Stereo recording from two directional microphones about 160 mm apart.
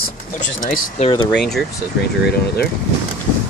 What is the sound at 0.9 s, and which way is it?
Speech, 35° left (ahead or behind).